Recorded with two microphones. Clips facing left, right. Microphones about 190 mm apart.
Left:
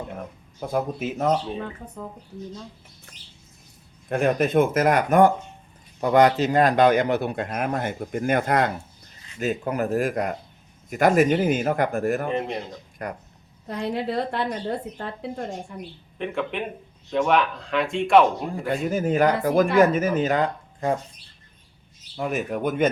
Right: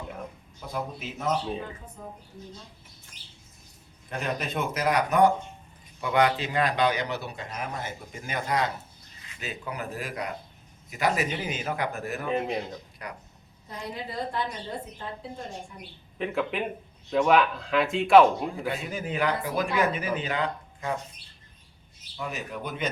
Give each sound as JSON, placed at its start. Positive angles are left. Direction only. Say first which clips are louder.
{"t": 0.6, "sound": "speech", "louder": "left 8 dB", "side_deg": 50}
{"t": 4.1, "sound": "a man's voice", "louder": "left 11 dB", "side_deg": 50}
{"t": 12.3, "sound": "speech", "louder": "left 1 dB", "side_deg": -5}
{"t": 13.0, "sound": "speech", "louder": "left 9 dB", "side_deg": 50}
{"t": 13.7, "sound": "a woman's voice", "louder": "left 10 dB", "side_deg": 70}
{"t": 16.1, "sound": "speech", "louder": "left 1 dB", "side_deg": 0}
{"t": 18.7, "sound": "speech", "louder": "left 9 dB", "side_deg": 45}
{"t": 22.2, "sound": "speech", "louder": "left 9 dB", "side_deg": 50}